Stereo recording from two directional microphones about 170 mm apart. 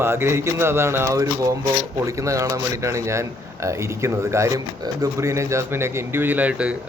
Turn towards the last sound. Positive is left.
turn(degrees=-5)  # may be behind; listen again after turning